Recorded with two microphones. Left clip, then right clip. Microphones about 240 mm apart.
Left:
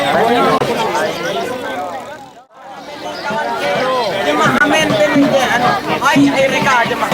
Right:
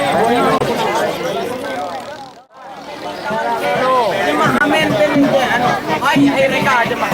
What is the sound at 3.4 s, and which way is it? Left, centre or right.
Music, centre.